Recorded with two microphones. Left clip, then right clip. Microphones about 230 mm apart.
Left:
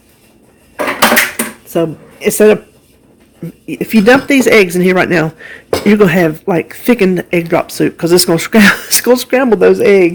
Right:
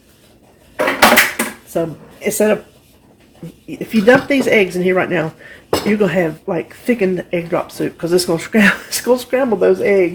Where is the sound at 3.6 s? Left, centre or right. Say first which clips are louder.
Left 3 dB; left.